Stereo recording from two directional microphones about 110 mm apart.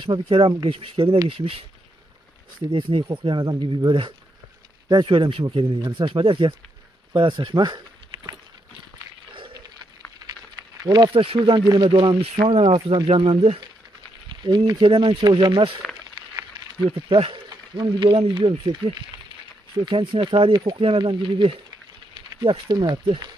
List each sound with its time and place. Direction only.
0.0 s speech: 50° right (ahead or behind)
2.7 s speech: 50° right (ahead or behind)
5.8 s speech: 45° right (ahead or behind)
10.8 s speech: 40° right (ahead or behind)
11.2 s speech: 55° right (ahead or behind)
11.6 s speech: 40° right (ahead or behind); by 13.6 s 60° right (ahead or behind)
14.3 s speech: 45° right (ahead or behind)
16.8 s speech: 50° right (ahead or behind)